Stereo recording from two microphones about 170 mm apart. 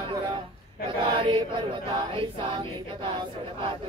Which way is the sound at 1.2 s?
30° right (ahead or behind).